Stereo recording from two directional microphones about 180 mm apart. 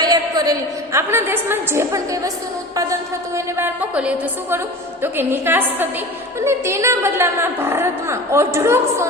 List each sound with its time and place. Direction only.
0.0 s a sound: 20° right (ahead or behind)
0.9 s a woman's voice: 15° right (ahead or behind)
3.3 s a woman's voice: 10° right (ahead or behind)